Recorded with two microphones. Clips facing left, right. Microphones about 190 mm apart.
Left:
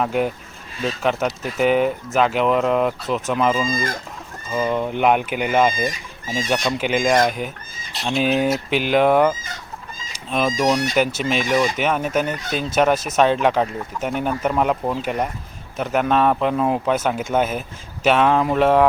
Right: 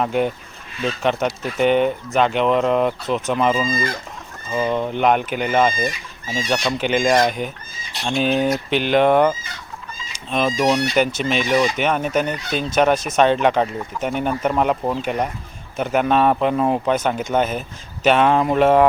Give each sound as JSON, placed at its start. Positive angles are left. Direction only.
{"t": 0.0, "sound": "speech", "side_deg": 5}
{"t": 3.7, "sound": "speech", "side_deg": 45}
{"t": 4.5, "sound": "speech", "side_deg": 5}